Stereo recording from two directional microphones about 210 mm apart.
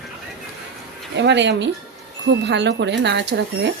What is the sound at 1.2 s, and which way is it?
Speech, 55° right (ahead or behind).